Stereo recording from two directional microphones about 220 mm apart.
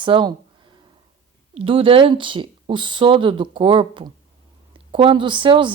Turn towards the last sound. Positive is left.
turn(degrees=-20)  # may be behind; listen again after turning